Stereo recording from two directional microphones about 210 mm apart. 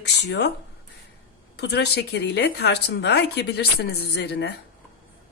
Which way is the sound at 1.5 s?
55° left (ahead or behind).